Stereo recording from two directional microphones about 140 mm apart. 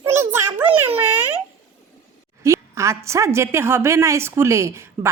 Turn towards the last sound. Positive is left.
turn(degrees=-20)  # may be behind; listen again after turning